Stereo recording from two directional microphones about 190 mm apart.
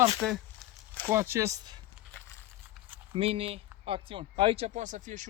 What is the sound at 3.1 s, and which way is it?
Speech, 30° right (ahead or behind).